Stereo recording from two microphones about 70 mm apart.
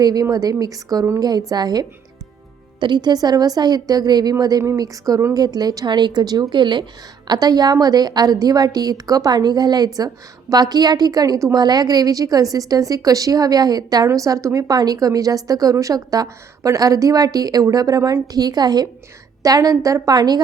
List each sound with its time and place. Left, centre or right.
0.0 s a woman's voice: right
2.9 s a woman's voice: right
7.3 s a woman's voice: right
11.5 s speech: right
14.1 s speech: right
19.4 s speech: right